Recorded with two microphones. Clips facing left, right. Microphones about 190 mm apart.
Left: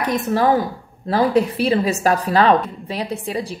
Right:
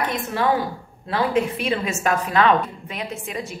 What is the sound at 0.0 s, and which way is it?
A woman's voice, 40° left (ahead or behind).